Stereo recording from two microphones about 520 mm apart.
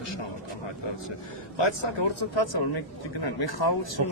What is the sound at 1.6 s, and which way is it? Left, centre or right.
Speech, left.